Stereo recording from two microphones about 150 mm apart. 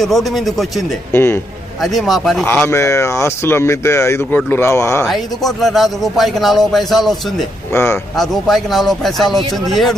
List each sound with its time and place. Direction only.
0.0 s speech: centre (ahead or behind)
1.1 s speech: 15° left (ahead or behind)
1.8 s speech: centre (ahead or behind)
2.5 s speech: 15° left (ahead or behind)
5.0 s speech: centre (ahead or behind)
7.7 s speech: 15° left (ahead or behind)
8.1 s speech: centre (ahead or behind)